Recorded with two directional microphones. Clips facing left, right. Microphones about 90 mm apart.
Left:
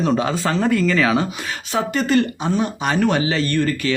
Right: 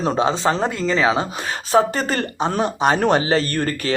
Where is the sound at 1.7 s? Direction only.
40° right (ahead or behind).